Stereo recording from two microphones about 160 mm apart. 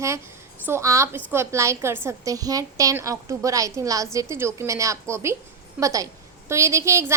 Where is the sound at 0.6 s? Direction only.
15° right (ahead or behind).